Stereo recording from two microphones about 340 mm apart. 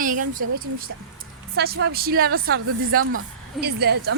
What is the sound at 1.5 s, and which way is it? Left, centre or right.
A woman's voice, right.